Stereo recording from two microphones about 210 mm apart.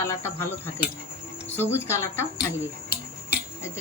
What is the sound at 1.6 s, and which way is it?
Speech, 10° left (ahead or behind).